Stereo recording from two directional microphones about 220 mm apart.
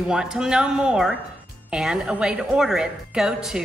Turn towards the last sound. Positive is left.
turn(degrees=0)  # may be behind; listen again after turning